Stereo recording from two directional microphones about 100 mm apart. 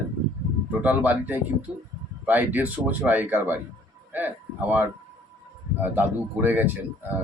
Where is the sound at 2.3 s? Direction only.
15° right (ahead or behind).